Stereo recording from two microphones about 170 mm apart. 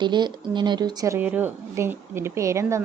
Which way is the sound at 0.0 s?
25° right (ahead or behind).